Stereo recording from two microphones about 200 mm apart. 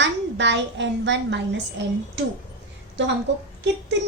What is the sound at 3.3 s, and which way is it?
Speech, 65° right (ahead or behind).